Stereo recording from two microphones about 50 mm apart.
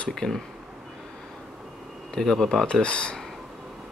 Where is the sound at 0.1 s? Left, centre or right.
Centre.